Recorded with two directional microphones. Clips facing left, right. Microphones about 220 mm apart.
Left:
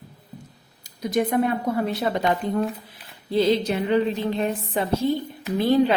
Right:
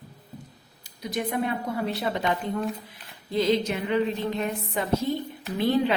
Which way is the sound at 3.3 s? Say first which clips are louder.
Left 3 dB; 30° left (ahead or behind).